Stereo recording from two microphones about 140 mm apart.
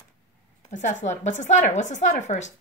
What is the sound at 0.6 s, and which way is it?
A woman's voice, 55° left (ahead or behind).